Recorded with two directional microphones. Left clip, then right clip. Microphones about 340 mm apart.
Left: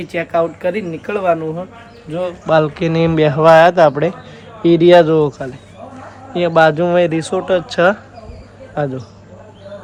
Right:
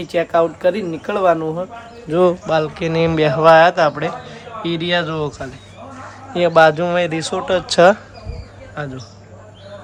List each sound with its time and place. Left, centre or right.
0.0 s speech: centre
2.0 s speech: right
2.5 s speech: centre
8.8 s a man's voice: centre